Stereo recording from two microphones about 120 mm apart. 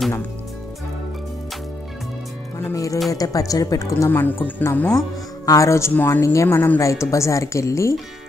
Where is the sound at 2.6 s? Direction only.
30° left (ahead or behind).